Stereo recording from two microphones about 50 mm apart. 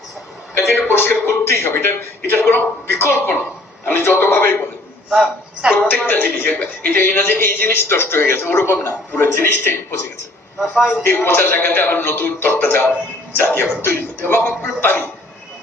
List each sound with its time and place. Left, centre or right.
0.9 s a sound: left
1.3 s a man's voice: left
5.1 s a woman's voice: centre
6.1 s speech: left
7.0 s a man's voice: left
10.8 s a man's voice: centre
11.0 s a man's voice: left